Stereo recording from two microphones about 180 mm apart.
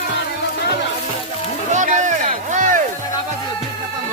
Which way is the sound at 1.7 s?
45° right (ahead or behind).